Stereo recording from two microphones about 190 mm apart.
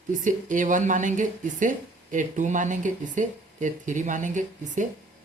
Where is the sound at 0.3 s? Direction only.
40° right (ahead or behind).